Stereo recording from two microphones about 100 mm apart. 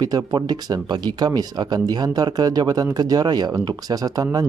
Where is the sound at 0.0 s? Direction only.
40° right (ahead or behind).